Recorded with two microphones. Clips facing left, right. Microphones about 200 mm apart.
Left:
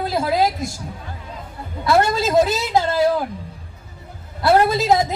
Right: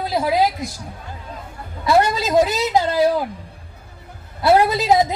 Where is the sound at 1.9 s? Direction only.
15° right (ahead or behind).